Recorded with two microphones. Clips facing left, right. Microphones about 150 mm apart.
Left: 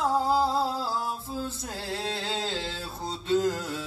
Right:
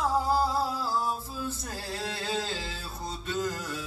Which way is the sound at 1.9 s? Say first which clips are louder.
Left 1 dB; 20° left (ahead or behind).